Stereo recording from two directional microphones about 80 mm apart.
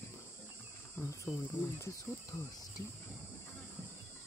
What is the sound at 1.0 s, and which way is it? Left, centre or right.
Cricket, left.